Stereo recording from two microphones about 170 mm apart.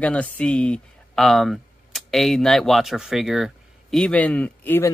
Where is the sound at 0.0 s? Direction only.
10° left (ahead or behind).